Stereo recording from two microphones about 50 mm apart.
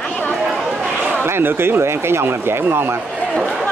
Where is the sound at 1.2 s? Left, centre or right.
Right.